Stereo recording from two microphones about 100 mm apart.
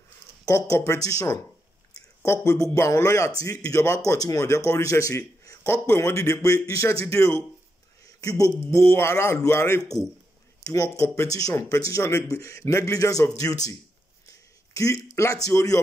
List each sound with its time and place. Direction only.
0.5 s speech: 30° left (ahead or behind)
2.4 s a man's voice: 35° left (ahead or behind)
8.0 s a sound: 35° left (ahead or behind)
8.5 s speech: 25° left (ahead or behind)
14.7 s a sound: 35° left (ahead or behind)
15.1 s speech: 35° left (ahead or behind)